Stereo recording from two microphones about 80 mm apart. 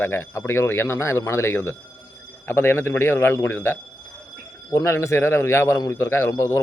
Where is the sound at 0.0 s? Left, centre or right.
Left.